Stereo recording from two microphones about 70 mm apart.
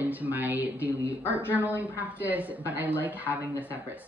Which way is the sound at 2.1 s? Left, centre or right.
Right.